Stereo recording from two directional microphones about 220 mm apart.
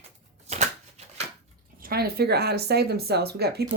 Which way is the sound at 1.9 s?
45° right (ahead or behind).